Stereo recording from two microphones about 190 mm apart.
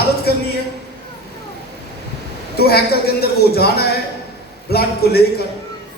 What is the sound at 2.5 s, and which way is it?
Speech, 55° left (ahead or behind).